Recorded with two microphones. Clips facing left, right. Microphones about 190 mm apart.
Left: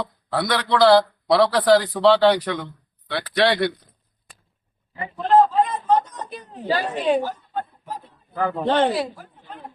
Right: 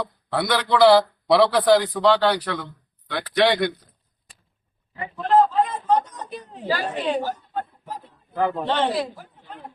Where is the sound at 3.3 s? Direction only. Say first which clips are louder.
Even; 15° right (ahead or behind).